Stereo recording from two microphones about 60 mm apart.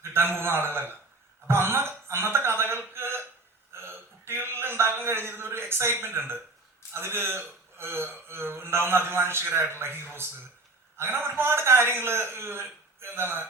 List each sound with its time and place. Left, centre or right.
0.0 s a man's voice: right
3.8 s a sound: right
6.9 s speech: right